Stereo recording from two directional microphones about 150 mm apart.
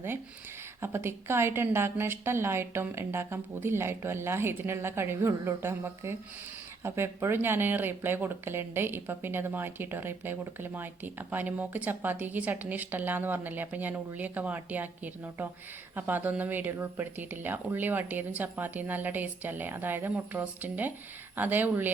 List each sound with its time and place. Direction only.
0.8 s speech: 15° right (ahead or behind)